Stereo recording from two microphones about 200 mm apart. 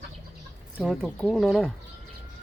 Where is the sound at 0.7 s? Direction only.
Centre (ahead or behind).